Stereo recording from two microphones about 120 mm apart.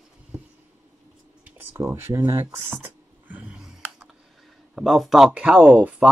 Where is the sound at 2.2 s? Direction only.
25° right (ahead or behind); by 5.3 s centre (ahead or behind).